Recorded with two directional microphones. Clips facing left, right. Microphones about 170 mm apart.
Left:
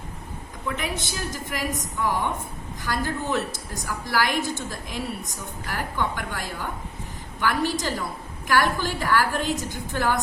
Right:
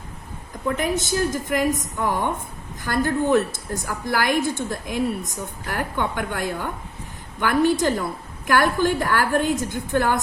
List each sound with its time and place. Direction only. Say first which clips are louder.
0.8 s a woman's voice: right 8 dB; 45° right (ahead or behind)